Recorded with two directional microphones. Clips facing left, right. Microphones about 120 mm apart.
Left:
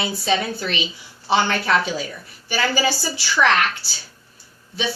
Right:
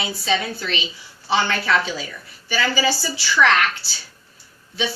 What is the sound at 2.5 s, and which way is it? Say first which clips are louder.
A woman's voice: even; 50° left (ahead or behind).